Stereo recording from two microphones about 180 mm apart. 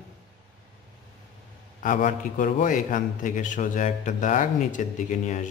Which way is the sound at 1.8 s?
45° left (ahead or behind).